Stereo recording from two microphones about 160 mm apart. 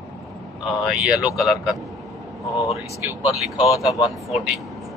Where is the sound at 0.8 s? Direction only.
5° right (ahead or behind).